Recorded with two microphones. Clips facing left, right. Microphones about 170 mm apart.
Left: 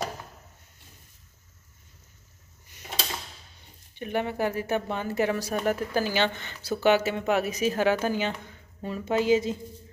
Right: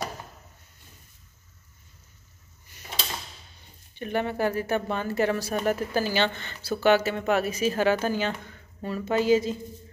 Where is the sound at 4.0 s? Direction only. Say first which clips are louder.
Right 1 dB; 15° left (ahead or behind).